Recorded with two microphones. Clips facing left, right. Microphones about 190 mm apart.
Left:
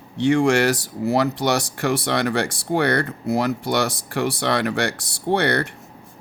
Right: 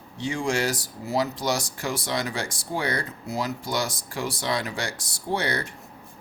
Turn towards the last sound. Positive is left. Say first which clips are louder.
# left 7 dB
turn(degrees=65)  # may be behind; listen again after turning